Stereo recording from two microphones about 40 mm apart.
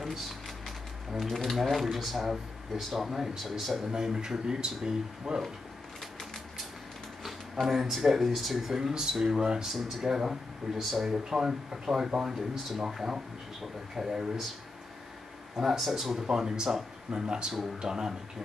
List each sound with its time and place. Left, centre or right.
0.0 s speech: centre
3.9 s speech: centre
7.6 s speech: centre
9.7 s speech: centre
15.6 s speech: centre
16.3 s speech: centre